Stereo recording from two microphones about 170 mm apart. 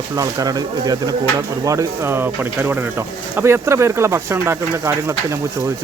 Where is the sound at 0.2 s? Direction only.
20° right (ahead or behind).